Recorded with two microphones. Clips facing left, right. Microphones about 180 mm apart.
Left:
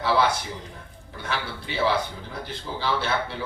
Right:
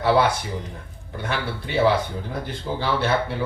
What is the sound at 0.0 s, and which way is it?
A man's voice, 55° right (ahead or behind).